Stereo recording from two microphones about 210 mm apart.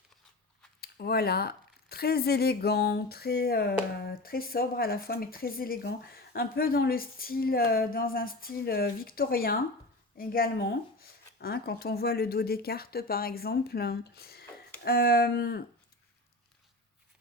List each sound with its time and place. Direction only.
0.8 s speech: 50° left (ahead or behind)